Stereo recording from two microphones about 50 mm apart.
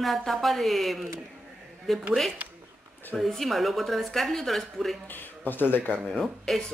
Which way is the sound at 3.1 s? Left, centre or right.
Centre.